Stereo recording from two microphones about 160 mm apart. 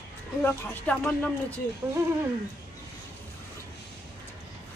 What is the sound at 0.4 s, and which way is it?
Speech, 10° left (ahead or behind).